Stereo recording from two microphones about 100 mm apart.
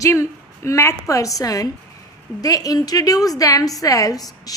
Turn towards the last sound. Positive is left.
turn(degrees=35)  # may be behind; listen again after turning